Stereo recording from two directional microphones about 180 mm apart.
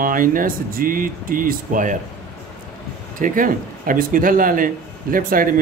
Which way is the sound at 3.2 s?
50° right (ahead or behind).